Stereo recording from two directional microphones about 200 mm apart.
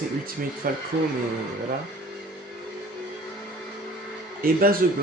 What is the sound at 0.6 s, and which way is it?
Speech, 45° right (ahead or behind).